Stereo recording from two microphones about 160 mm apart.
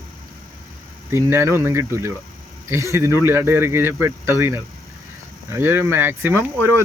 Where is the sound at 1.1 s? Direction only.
15° right (ahead or behind).